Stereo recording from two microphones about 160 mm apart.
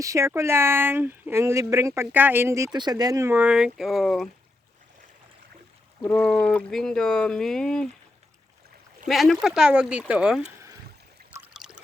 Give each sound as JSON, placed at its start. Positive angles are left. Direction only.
{"t": 0.0, "sound": "speech", "side_deg": -20}
{"t": 6.0, "sound": "speech", "side_deg": 5}
{"t": 9.0, "sound": "speech", "side_deg": 0}
{"t": 11.6, "sound": "trickle", "side_deg": -5}